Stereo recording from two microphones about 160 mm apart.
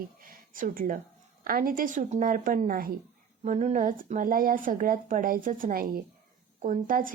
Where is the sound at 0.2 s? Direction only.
60° right (ahead or behind).